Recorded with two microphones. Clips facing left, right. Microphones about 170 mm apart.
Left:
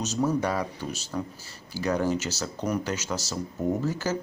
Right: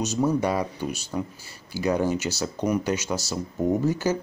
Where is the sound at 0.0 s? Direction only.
10° right (ahead or behind).